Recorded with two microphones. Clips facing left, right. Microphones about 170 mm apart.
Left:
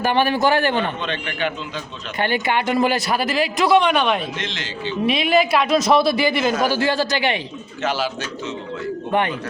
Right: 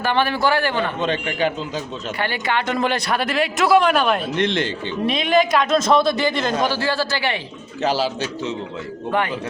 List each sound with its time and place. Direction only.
0.0 s a man's voice: 15° left (ahead or behind)
1.0 s speech: 40° right (ahead or behind)
2.1 s speech: 20° left (ahead or behind); by 4.2 s centre (ahead or behind)
4.4 s a man's voice: 55° right (ahead or behind)
5.0 s a man's voice: 5° left (ahead or behind)
7.8 s speech: 35° right (ahead or behind)